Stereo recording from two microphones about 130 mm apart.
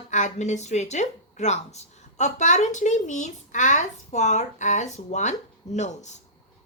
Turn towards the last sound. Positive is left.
turn(degrees=65)  # may be behind; listen again after turning